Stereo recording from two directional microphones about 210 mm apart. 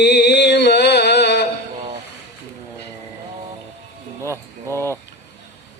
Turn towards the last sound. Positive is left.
turn(degrees=10)  # may be behind; listen again after turning